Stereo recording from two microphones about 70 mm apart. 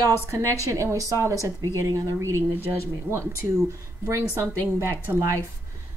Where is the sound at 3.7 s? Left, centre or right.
Right.